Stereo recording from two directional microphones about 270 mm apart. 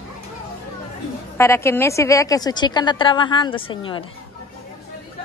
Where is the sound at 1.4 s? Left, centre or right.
Centre.